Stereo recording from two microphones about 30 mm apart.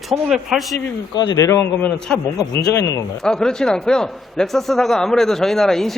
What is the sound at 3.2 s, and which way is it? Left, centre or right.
A man's voice, left.